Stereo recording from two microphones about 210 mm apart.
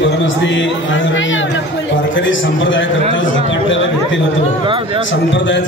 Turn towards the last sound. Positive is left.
turn(degrees=60)  # may be behind; listen again after turning